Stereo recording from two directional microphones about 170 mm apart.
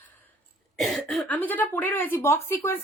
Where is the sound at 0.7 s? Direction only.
Centre (ahead or behind).